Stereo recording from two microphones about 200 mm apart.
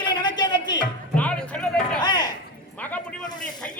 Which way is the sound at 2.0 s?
20° left (ahead or behind).